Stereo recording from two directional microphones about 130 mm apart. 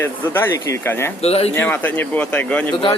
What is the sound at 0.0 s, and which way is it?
Speech, 20° left (ahead or behind).